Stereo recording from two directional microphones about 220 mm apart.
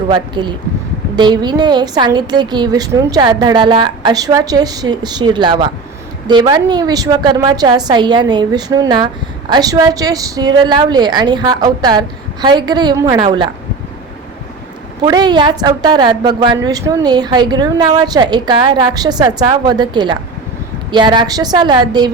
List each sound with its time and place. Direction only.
0.1 s a woman's voice: 20° right (ahead or behind)
15.0 s a woman's voice: 20° right (ahead or behind)